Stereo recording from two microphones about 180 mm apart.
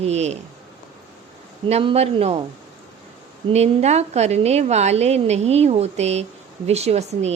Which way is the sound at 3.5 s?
35° right (ahead or behind).